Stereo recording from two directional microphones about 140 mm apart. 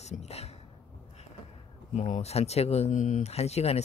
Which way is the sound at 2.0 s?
60° left (ahead or behind).